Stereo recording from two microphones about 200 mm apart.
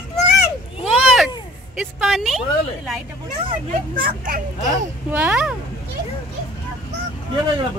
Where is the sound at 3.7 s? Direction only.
45° right (ahead or behind).